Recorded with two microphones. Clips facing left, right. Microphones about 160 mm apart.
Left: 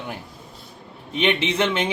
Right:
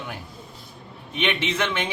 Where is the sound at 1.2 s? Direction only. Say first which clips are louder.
Left 4 dB; 25° left (ahead or behind).